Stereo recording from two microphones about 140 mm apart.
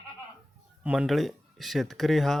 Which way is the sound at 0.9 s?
5° right (ahead or behind).